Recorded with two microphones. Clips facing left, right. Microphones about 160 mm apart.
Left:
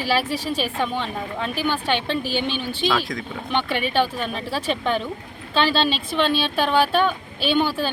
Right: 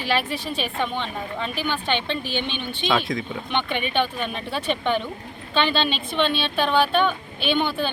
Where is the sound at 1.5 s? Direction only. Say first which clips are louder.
Left 3 dB; 40° left (ahead or behind).